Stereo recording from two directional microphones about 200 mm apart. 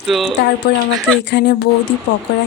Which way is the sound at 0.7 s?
50° left (ahead or behind).